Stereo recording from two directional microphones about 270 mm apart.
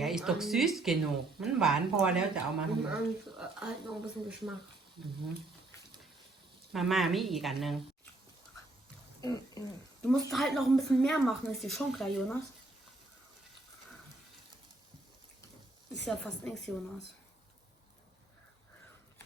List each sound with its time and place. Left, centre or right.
0.0 s speech: centre
6.7 s speech: centre
9.2 s speech: centre
10.1 s speech: centre
16.0 s speech: centre